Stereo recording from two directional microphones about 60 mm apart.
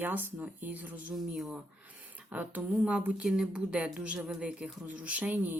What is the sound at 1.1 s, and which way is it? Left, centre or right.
Speech, centre.